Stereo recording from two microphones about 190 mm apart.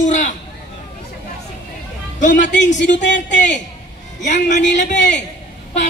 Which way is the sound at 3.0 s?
65° left (ahead or behind).